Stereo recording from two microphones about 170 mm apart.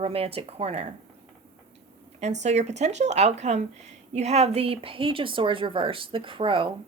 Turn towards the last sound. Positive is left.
turn(degrees=-30)  # may be behind; listen again after turning